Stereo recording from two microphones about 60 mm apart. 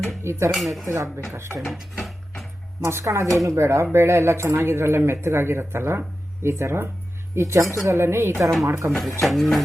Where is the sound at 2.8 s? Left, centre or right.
Right.